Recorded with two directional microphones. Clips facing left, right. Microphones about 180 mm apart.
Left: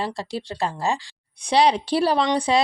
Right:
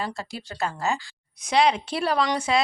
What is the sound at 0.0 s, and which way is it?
A woman's voice, 30° left (ahead or behind).